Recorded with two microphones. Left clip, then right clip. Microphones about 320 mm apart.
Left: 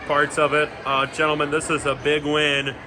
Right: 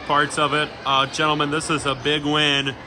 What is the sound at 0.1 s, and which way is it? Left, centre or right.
Speech, centre.